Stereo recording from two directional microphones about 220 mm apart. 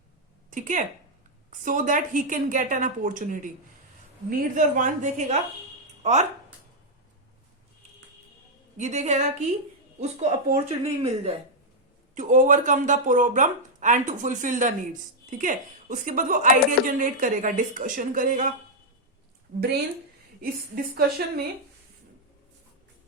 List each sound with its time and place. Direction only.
0.5 s a woman's voice: 35° right (ahead or behind)
8.8 s a woman's voice: 30° right (ahead or behind)
20.4 s a woman's voice: 45° right (ahead or behind)